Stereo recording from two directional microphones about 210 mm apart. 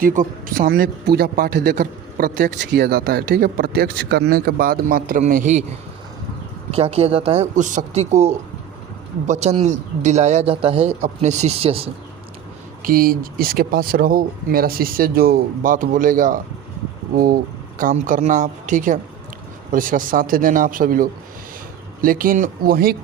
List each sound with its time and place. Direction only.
0.0 s speech: 40° right (ahead or behind)
6.7 s speech: 30° right (ahead or behind)
12.8 s speech: 45° right (ahead or behind)